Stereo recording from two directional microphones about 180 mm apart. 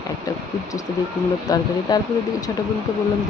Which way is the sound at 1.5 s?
20° left (ahead or behind).